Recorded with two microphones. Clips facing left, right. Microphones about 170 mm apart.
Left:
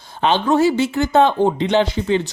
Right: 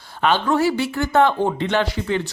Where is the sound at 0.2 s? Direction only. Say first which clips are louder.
Left 3 dB; 20° left (ahead or behind).